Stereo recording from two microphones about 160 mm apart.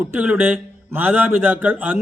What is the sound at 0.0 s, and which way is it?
Speech, 10° right (ahead or behind).